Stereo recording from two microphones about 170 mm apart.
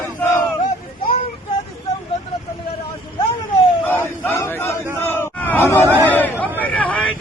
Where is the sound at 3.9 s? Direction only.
10° left (ahead or behind).